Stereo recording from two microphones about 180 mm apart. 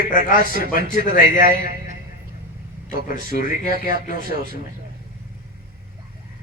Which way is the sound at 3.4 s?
50° left (ahead or behind).